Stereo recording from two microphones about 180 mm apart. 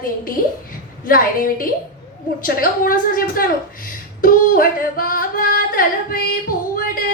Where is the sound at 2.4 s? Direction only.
50° left (ahead or behind).